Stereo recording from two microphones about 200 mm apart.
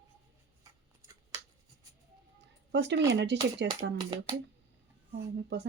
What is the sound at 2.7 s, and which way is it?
Speech, 60° right (ahead or behind).